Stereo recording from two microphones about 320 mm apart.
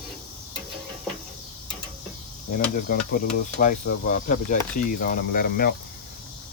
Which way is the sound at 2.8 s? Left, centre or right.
Left.